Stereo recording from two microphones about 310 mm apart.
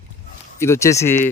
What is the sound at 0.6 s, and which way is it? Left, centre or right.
Speech, centre.